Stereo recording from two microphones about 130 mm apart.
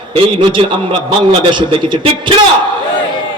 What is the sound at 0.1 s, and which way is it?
A man's voice, 40° right (ahead or behind).